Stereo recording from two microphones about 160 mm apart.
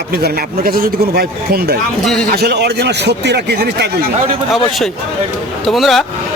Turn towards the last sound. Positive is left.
turn(degrees=0)  # may be behind; listen again after turning